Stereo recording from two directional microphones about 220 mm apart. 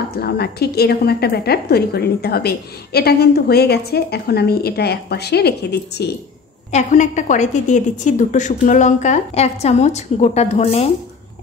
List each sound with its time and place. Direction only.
0.1 s a woman's voice: 45° left (ahead or behind)
6.7 s a woman's voice: 35° left (ahead or behind)